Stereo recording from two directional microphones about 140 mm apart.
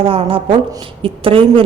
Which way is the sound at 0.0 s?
40° right (ahead or behind).